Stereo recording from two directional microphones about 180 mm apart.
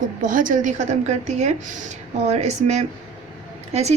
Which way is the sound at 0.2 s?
45° right (ahead or behind).